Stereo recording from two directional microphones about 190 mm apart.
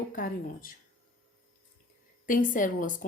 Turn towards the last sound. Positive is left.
turn(degrees=45)  # may be behind; listen again after turning